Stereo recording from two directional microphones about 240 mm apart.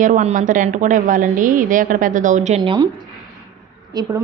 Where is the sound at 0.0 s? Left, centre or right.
Right.